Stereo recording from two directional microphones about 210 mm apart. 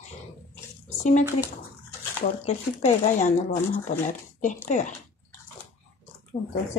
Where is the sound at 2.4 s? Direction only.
35° left (ahead or behind).